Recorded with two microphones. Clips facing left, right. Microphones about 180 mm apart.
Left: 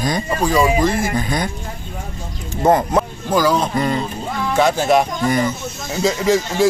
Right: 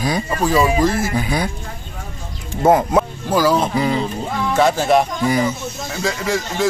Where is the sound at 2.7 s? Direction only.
5° right (ahead or behind).